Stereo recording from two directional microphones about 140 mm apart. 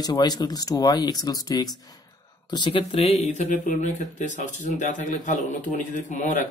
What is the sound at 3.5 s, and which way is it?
Speech, 65° left (ahead or behind).